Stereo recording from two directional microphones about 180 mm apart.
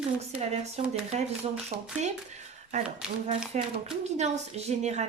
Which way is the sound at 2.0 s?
40° right (ahead or behind).